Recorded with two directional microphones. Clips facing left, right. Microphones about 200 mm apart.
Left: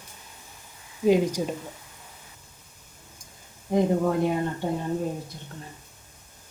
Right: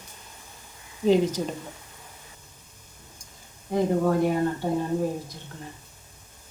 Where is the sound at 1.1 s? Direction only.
10° left (ahead or behind).